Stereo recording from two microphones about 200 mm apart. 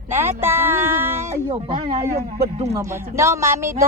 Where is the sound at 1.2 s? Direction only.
30° right (ahead or behind).